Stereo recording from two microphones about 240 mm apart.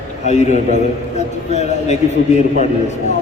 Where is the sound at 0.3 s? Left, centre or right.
Left.